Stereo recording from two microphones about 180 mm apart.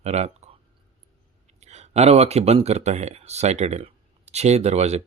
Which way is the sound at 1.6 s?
40° right (ahead or behind).